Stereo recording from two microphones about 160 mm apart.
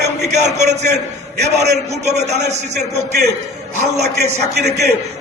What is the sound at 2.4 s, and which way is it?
Speech, 45° right (ahead or behind).